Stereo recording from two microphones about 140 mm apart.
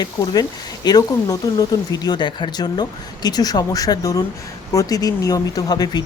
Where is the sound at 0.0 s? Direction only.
25° left (ahead or behind).